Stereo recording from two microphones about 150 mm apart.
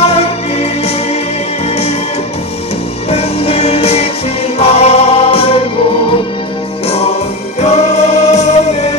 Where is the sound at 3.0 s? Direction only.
45° left (ahead or behind).